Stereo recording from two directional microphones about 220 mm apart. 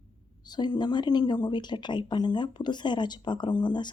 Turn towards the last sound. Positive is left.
turn(degrees=20)  # may be behind; listen again after turning